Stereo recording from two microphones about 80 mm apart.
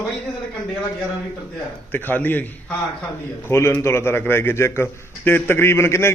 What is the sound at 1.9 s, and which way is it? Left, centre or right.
Speech, left.